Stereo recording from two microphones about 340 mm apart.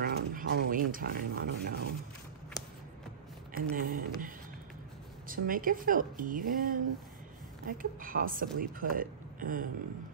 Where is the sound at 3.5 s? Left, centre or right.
Right.